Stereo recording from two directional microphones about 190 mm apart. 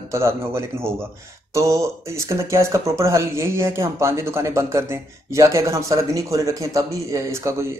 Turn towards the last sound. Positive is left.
turn(degrees=-15)  # may be behind; listen again after turning